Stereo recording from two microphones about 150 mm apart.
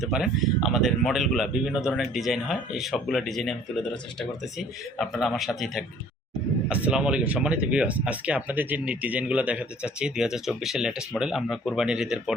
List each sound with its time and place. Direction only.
0.0 s a man's voice: centre (ahead or behind)
4.9 s a man's voice: centre (ahead or behind)